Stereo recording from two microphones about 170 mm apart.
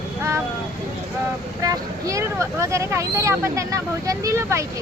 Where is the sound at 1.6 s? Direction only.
20° right (ahead or behind).